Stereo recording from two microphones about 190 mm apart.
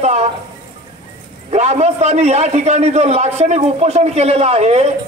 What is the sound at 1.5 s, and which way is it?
A man's voice, 35° right (ahead or behind).